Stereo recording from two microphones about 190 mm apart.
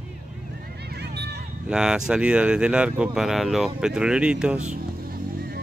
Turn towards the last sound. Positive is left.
turn(degrees=-5)  # may be behind; listen again after turning